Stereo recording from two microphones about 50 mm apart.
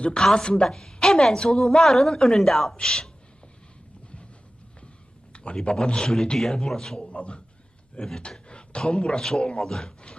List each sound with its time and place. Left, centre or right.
0.2 s a woman's voice: centre
5.3 s a man's voice: centre
7.1 s a man's voice: left